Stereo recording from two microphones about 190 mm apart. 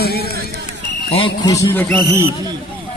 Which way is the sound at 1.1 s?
25° left (ahead or behind).